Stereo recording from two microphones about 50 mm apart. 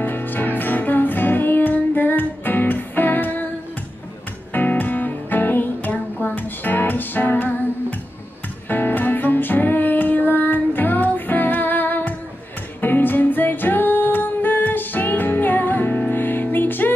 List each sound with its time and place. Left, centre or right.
0.0 s music: left
4.5 s music: left
8.6 s music: left